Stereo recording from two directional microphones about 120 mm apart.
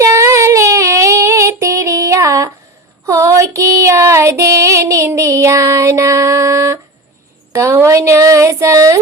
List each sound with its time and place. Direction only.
0.0 s female singing: 25° right (ahead or behind)
7.5 s speech: 25° right (ahead or behind)